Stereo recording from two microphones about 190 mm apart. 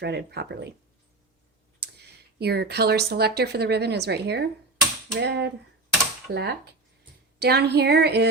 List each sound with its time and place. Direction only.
0.0 s a woman's voice: 60° right (ahead or behind)
1.8 s a woman's voice: 60° right (ahead or behind)